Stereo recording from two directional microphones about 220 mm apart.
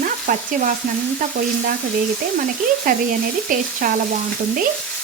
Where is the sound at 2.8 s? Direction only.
40° right (ahead or behind).